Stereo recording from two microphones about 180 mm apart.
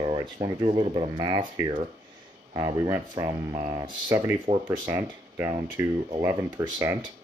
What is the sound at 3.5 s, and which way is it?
Speech, 25° right (ahead or behind).